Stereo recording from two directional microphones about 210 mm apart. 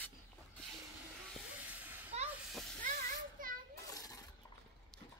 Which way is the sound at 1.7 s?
10° right (ahead or behind).